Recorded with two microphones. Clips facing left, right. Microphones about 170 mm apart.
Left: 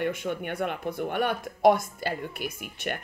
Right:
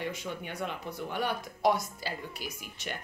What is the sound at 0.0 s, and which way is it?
Speech, 55° left (ahead or behind).